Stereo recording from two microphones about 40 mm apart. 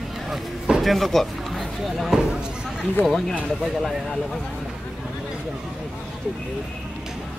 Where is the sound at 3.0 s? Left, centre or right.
Left.